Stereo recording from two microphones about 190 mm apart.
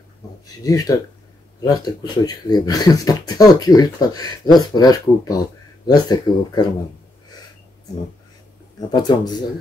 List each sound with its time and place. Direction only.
0.7 s speech: 20° left (ahead or behind)
2.2 s speech: 20° left (ahead or behind)
8.9 s speech: 20° left (ahead or behind)